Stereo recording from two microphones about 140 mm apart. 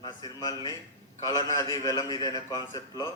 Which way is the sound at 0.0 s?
30° left (ahead or behind).